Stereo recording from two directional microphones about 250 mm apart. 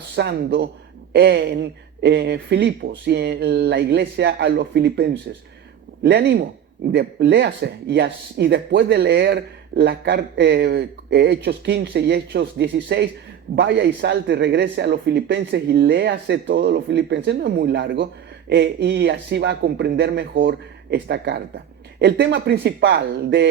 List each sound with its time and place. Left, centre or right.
0.2 s speech: right